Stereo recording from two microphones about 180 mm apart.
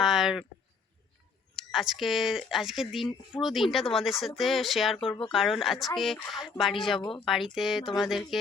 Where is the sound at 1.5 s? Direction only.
Centre (ahead or behind).